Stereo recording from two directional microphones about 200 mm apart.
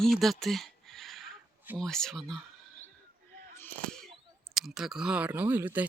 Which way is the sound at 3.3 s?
40° right (ahead or behind).